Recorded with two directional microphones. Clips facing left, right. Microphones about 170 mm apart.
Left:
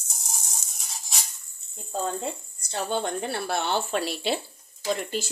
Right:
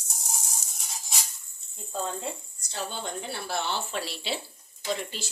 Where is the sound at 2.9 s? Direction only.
60° left (ahead or behind).